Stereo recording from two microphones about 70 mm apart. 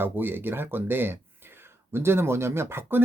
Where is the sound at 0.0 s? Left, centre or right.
Right.